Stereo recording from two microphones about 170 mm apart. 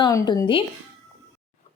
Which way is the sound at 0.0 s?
20° left (ahead or behind).